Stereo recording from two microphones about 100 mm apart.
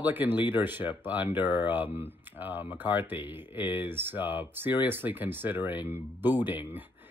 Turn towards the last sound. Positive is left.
turn(degrees=-20)  # may be behind; listen again after turning